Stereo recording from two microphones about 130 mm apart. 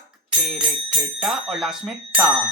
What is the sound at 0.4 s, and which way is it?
Speech, 5° right (ahead or behind).